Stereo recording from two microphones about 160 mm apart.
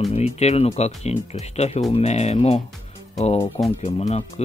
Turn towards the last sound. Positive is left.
turn(degrees=40)  # may be behind; listen again after turning